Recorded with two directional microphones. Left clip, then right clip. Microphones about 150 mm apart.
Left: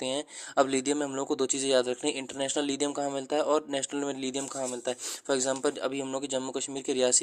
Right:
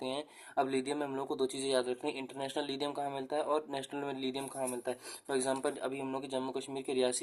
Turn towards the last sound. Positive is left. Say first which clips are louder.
# left 6 dB
turn(degrees=35)  # may be behind; listen again after turning